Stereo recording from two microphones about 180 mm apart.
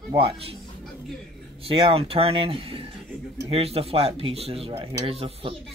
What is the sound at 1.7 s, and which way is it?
Speech, 30° right (ahead or behind).